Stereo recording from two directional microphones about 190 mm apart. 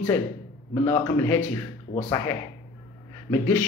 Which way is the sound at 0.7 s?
15° left (ahead or behind).